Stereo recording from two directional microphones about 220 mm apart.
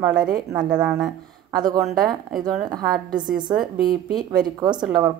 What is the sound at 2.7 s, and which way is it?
Speech, 20° right (ahead or behind).